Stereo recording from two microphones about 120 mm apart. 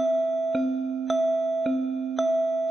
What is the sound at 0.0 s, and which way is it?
Music, centre (ahead or behind).